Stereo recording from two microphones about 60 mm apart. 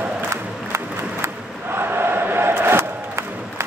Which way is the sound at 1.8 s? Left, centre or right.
Right.